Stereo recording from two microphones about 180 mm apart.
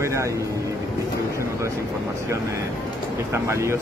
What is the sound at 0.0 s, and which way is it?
Vehicle, 15° right (ahead or behind).